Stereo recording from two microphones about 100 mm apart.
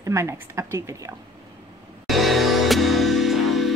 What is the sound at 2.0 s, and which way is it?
Music, centre (ahead or behind).